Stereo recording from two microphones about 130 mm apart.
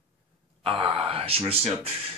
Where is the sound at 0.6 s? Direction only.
45° right (ahead or behind).